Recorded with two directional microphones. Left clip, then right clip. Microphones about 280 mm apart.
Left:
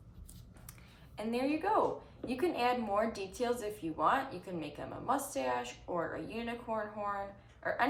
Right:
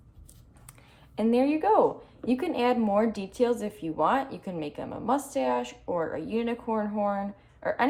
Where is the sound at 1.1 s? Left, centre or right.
Right.